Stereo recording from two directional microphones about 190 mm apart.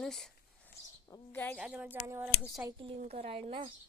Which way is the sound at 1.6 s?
5° right (ahead or behind).